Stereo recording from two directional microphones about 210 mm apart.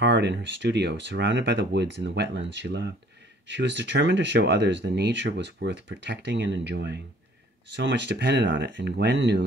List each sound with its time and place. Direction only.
0.0 s speech: 55° right (ahead or behind)